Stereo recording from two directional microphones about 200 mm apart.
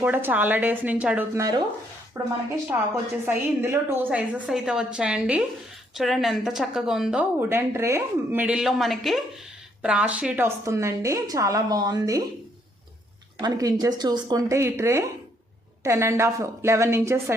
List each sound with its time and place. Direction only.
0.0 s a woman's voice: 10° right (ahead or behind)
13.4 s a woman's voice: 20° right (ahead or behind)